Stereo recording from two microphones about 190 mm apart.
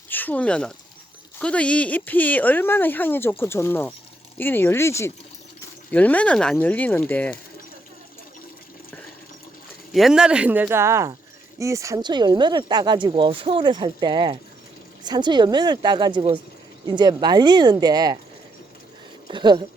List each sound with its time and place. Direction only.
0.1 s speech: 10° left (ahead or behind)
9.9 s speech: centre (ahead or behind); by 18.2 s 20° right (ahead or behind)
19.3 s speech: 25° right (ahead or behind)